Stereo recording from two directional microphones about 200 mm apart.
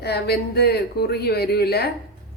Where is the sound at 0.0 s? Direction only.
55° left (ahead or behind).